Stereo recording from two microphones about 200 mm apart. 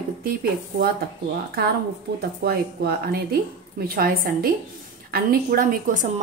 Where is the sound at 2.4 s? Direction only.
50° right (ahead or behind).